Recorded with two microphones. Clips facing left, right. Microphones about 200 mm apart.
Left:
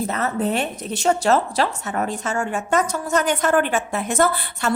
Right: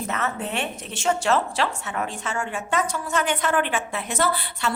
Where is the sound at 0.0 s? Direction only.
35° left (ahead or behind).